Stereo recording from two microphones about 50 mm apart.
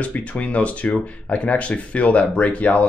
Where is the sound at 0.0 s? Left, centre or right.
Left.